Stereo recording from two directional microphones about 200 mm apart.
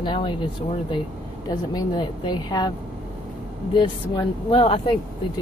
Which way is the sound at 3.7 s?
25° left (ahead or behind).